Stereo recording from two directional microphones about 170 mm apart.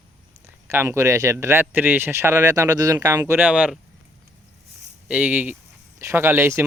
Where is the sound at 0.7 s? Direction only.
15° right (ahead or behind).